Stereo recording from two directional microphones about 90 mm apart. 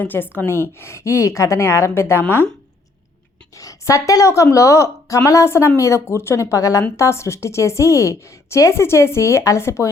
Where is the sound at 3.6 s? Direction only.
35° left (ahead or behind).